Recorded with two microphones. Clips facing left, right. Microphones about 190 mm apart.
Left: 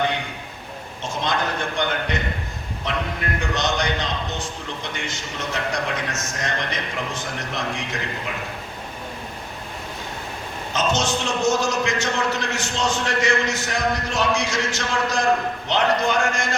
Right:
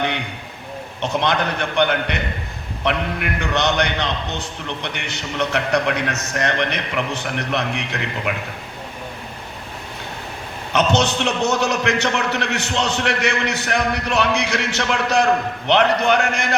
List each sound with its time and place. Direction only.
1.0 s a man's voice: 65° right (ahead or behind)
10.7 s a man's voice: 65° right (ahead or behind)